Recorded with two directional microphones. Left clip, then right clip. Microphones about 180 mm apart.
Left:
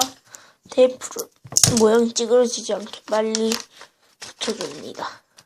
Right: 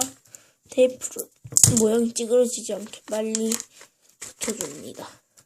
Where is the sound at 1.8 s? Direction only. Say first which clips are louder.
Left 5 dB; 30° right (ahead or behind).